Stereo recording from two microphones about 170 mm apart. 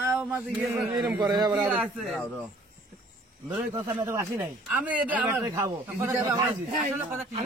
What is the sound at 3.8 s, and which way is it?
Speech, 15° right (ahead or behind).